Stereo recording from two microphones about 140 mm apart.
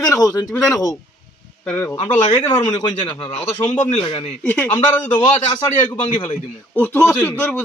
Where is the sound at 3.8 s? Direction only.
50° left (ahead or behind).